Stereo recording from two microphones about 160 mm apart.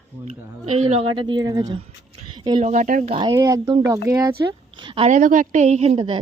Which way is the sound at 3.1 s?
35° right (ahead or behind).